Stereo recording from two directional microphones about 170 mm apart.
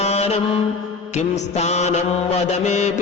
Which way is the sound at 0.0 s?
40° left (ahead or behind).